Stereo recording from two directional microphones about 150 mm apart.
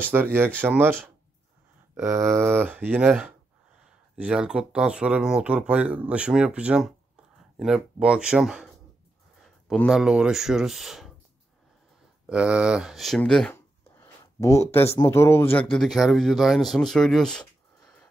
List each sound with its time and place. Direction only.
0.1 s speech: 15° right (ahead or behind)
2.0 s speech: 15° right (ahead or behind)
12.3 s speech: 5° right (ahead or behind)
13.9 s a sound: 20° left (ahead or behind)
15.0 s speech: 20° left (ahead or behind)